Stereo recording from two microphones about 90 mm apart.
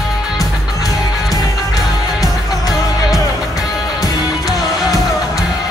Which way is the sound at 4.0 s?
45° left (ahead or behind).